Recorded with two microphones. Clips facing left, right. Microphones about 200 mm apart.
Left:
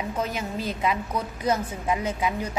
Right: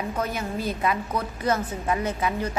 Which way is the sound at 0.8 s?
10° left (ahead or behind).